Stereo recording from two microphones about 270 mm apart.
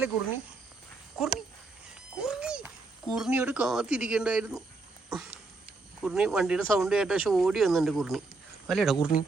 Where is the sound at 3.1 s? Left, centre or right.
Centre.